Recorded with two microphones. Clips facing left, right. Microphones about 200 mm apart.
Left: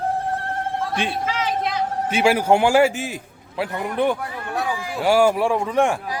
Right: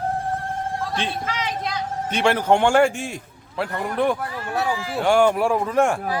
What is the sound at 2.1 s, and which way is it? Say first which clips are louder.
A man's voice: left 1 dB; 10° left (ahead or behind).